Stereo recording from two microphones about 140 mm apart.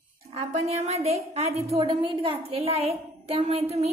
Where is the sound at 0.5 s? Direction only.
50° right (ahead or behind).